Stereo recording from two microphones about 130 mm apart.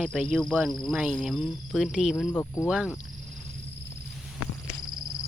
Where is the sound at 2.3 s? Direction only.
20° left (ahead or behind).